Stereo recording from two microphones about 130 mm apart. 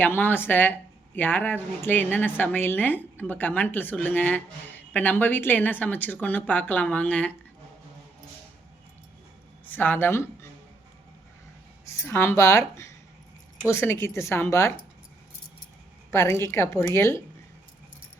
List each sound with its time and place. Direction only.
0.0 s speech: 15° left (ahead or behind)
9.6 s speech: 15° left (ahead or behind)
11.9 s a woman's voice: 20° left (ahead or behind)
16.1 s a woman's voice: 25° left (ahead or behind)